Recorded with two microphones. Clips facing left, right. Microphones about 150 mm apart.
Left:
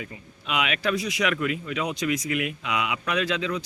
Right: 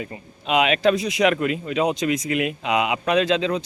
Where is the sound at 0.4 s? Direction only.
25° right (ahead or behind).